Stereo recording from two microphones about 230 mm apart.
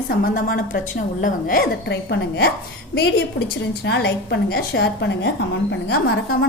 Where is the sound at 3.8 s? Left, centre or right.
Left.